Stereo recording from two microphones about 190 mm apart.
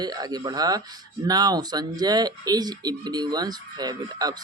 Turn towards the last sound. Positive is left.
turn(degrees=-20)  # may be behind; listen again after turning